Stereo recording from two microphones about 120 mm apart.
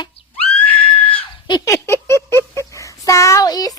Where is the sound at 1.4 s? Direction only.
40° left (ahead or behind).